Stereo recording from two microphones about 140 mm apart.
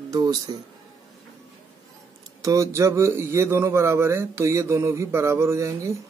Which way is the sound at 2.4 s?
20° right (ahead or behind).